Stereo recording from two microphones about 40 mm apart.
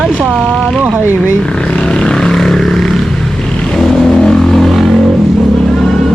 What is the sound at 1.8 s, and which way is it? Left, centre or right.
Vehicle, left.